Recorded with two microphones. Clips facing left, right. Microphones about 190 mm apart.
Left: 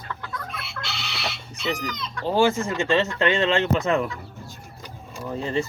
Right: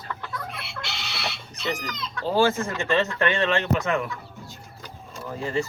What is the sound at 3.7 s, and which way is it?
Speech, 30° left (ahead or behind).